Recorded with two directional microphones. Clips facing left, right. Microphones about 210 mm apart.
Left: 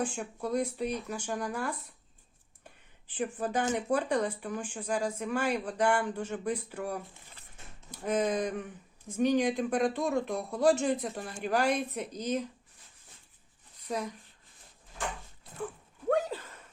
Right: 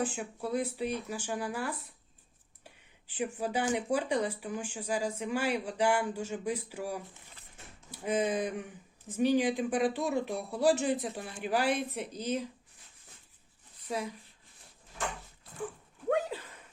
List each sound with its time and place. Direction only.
0.0 s speech: 5° right (ahead or behind)
2.6 s a sound: 10° right (ahead or behind)
3.3 s speech: 10° right (ahead or behind)